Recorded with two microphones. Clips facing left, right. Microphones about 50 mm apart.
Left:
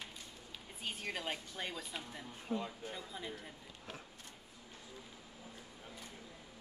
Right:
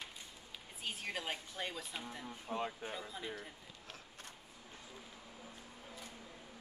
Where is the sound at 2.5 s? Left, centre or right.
Right.